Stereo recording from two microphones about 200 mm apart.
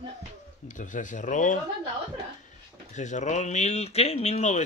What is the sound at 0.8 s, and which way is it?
Speech, 40° left (ahead or behind).